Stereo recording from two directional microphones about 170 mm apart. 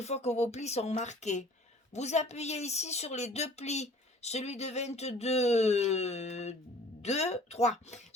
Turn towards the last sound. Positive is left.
turn(degrees=40)  # may be behind; listen again after turning